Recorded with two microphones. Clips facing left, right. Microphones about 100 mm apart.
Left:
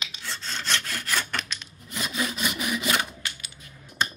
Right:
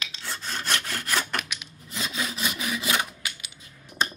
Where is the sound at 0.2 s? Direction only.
10° right (ahead or behind).